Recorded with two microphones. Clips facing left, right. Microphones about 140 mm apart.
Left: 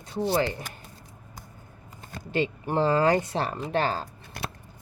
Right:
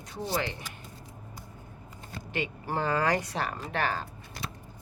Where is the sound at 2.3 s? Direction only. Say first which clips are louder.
Left 6 dB; 30° left (ahead or behind).